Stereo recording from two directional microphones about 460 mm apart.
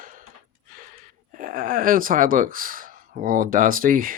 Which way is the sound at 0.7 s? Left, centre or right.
Centre.